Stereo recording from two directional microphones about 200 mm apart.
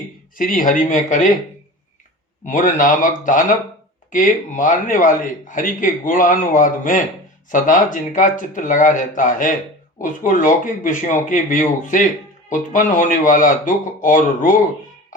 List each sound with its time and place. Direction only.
0.3 s speech: 45° left (ahead or behind)
2.4 s speech: 40° left (ahead or behind)